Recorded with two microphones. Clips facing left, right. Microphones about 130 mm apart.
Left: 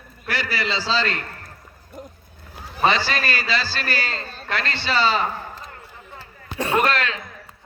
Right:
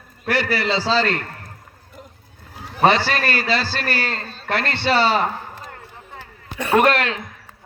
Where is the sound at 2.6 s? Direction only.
60° right (ahead or behind).